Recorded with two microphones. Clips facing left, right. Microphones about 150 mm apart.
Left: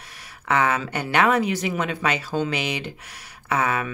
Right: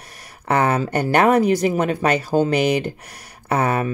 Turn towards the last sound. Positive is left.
turn(degrees=-45)  # may be behind; listen again after turning